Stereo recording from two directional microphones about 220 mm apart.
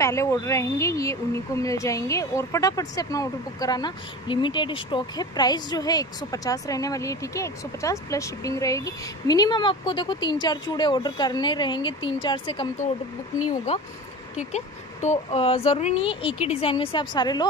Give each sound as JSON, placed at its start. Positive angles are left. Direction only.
{"t": 0.0, "sound": "speech", "side_deg": 15}
{"t": 14.5, "sound": "a child's voice", "side_deg": 30}